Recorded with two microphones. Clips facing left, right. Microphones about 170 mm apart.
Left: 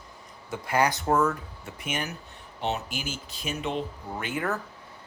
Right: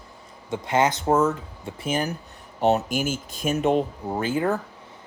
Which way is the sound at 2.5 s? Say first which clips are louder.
Right 10 dB; 45° right (ahead or behind).